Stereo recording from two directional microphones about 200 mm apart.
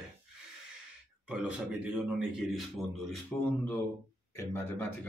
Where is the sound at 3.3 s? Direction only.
10° left (ahead or behind).